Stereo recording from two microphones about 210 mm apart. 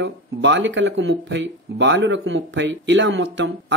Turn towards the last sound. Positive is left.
turn(degrees=-60)  # may be behind; listen again after turning